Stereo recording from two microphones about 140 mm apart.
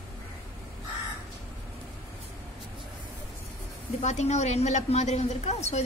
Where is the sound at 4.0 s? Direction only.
55° left (ahead or behind).